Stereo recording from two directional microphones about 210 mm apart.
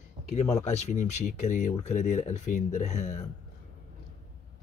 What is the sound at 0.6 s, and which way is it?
Speech, 35° left (ahead or behind).